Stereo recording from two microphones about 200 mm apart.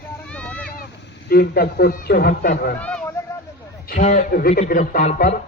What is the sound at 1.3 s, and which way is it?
Speech, 50° left (ahead or behind).